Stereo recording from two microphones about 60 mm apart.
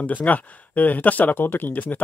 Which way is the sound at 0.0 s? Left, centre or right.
Left.